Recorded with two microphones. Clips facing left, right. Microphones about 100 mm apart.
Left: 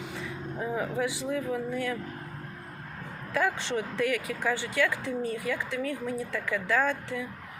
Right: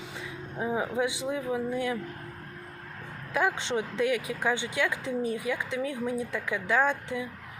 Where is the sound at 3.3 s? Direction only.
20° right (ahead or behind).